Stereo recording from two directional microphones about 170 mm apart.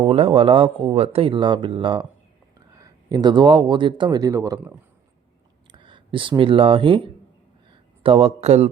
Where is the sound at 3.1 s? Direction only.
25° right (ahead or behind).